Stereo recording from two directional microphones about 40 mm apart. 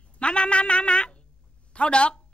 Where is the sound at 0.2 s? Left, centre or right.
Left.